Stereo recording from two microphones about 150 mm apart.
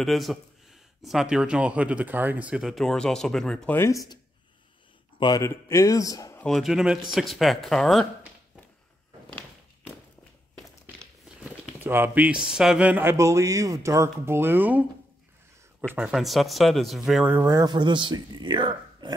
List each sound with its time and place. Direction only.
0.0 s speech: centre (ahead or behind)
3.7 s a man's voice: 20° left (ahead or behind)
5.2 s a man's voice: 25° left (ahead or behind)
6.4 s speech: centre (ahead or behind)
11.8 s speech: 15° right (ahead or behind)
15.9 s speech: 5° right (ahead or behind)
17.3 s speech: 15° right (ahead or behind)